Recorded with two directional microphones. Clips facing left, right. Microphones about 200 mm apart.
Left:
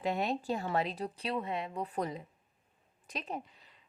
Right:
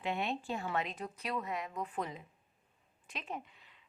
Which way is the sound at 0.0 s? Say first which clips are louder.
Left 4 dB; 40° left (ahead or behind).